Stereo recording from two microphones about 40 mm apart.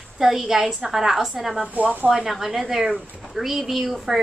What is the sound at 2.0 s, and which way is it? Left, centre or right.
Speech, centre.